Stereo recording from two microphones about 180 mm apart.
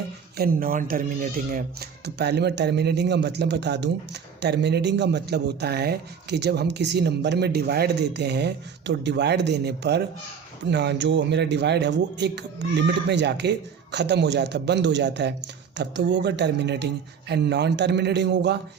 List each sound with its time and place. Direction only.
0.3 s speech: 55° right (ahead or behind); by 18.5 s 70° right (ahead or behind)